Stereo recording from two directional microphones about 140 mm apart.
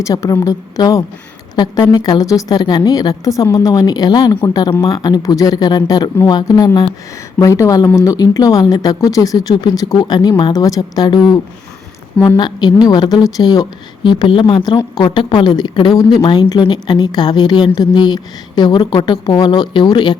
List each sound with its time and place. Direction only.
0.0 s speech: 25° left (ahead or behind)
12.4 s a woman's voice: 30° left (ahead or behind)